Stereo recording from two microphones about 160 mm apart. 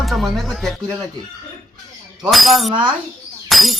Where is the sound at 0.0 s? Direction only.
Centre (ahead or behind).